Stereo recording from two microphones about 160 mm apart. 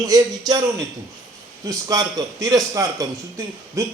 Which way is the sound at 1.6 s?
20° right (ahead or behind).